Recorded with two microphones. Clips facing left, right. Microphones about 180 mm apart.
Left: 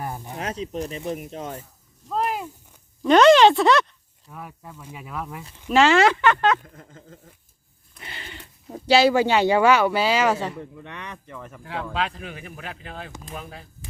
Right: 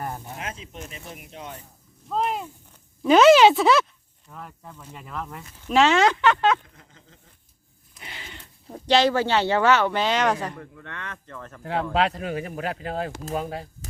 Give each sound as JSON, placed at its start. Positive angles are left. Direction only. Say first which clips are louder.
{"t": 0.0, "sound": "a sound", "louder": "left 1 dB", "side_deg": 0}
{"t": 0.3, "sound": "speech", "louder": "left 8 dB", "side_deg": 40}
{"t": 2.0, "sound": "speech", "louder": "even", "side_deg": 0}
{"t": 5.7, "sound": "speech", "louder": "left 2 dB", "side_deg": 0}
{"t": 6.6, "sound": "speech", "louder": "left 8 dB", "side_deg": 50}
{"t": 7.9, "sound": "speech", "louder": "left 2 dB", "side_deg": 0}
{"t": 10.6, "sound": "speech", "louder": "left 2 dB", "side_deg": 15}
{"t": 11.6, "sound": "speech", "louder": "right 5 dB", "side_deg": -35}